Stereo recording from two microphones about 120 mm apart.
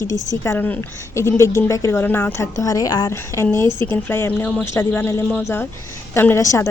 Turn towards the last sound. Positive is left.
turn(degrees=25)  # may be behind; listen again after turning